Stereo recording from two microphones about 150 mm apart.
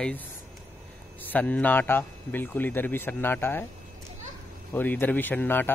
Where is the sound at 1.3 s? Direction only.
10° left (ahead or behind).